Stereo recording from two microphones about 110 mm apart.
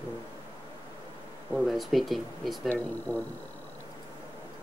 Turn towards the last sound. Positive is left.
turn(degrees=15)  # may be behind; listen again after turning